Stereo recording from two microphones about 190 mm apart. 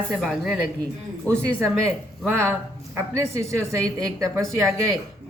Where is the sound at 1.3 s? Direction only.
15° right (ahead or behind).